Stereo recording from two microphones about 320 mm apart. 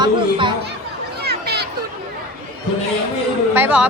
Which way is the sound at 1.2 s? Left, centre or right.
Right.